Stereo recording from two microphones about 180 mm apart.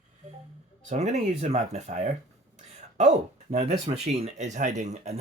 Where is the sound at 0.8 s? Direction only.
35° right (ahead or behind).